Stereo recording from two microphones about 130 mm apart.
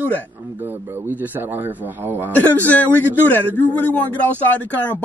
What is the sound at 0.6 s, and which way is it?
A man's voice, 15° right (ahead or behind).